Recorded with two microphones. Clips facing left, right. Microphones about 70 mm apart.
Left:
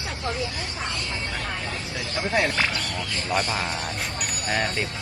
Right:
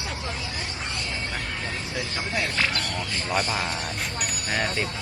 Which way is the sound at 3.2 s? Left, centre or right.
Centre.